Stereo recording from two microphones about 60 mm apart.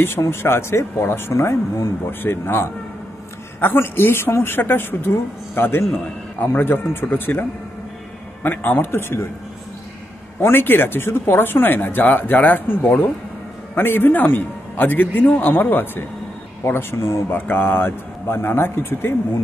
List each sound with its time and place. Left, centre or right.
0.3 s speech: left
10.4 s speech: left
17.4 s speech: left